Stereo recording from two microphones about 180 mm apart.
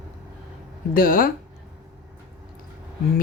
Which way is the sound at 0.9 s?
50° left (ahead or behind).